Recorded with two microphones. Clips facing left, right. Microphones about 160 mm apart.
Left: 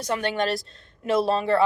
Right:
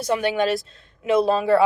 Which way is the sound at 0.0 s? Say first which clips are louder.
Right 4 dB; 10° right (ahead or behind).